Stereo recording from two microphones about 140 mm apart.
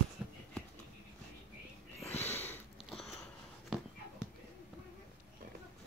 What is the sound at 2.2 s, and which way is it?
Sniff, 15° left (ahead or behind).